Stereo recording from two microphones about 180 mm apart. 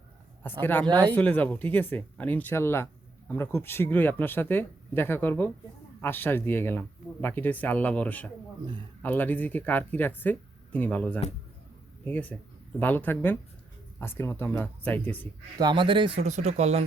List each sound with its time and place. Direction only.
0.6 s speech: 10° left (ahead or behind)
0.9 s speech: 25° right (ahead or behind)
1.1 s speech: 10° left (ahead or behind)
15.5 s speech: 25° right (ahead or behind)